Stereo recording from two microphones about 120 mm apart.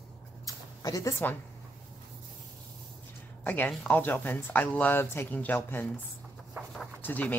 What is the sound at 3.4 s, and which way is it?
Speech, 15° left (ahead or behind).